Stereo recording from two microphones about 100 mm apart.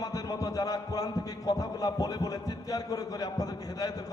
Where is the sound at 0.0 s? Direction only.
40° left (ahead or behind).